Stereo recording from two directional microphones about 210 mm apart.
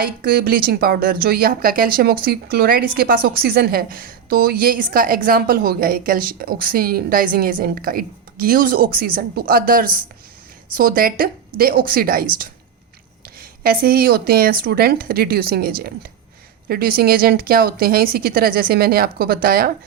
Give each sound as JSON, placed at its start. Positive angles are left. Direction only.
{"t": 0.0, "sound": "a woman's voice", "side_deg": -45}